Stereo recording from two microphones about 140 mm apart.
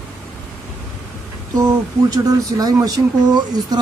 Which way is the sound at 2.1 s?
25° right (ahead or behind).